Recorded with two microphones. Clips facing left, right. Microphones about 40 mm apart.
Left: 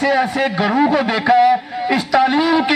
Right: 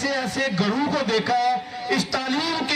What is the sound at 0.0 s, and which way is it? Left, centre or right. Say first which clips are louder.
A man's voice: left 8 dB; left.